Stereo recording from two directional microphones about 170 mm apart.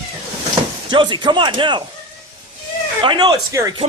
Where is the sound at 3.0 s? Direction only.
25° right (ahead or behind).